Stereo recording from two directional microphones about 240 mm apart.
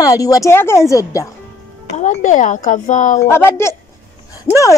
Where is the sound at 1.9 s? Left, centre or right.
Left.